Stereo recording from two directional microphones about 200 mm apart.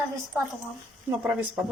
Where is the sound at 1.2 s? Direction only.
5° right (ahead or behind).